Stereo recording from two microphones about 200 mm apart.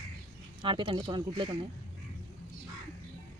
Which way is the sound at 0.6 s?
25° right (ahead or behind).